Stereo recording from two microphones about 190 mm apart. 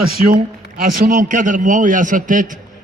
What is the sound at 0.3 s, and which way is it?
A man's voice, 45° right (ahead or behind).